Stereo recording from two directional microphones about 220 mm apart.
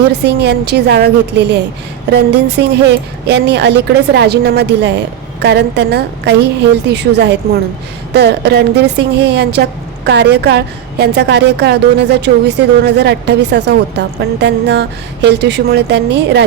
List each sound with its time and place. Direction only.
0.3 s a woman's voice: 50° right (ahead or behind)